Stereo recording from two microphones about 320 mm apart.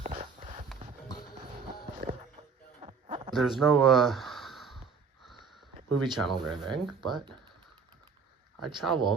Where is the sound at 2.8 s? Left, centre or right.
Centre.